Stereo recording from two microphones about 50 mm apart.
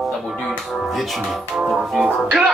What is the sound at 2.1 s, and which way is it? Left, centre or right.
Music, centre.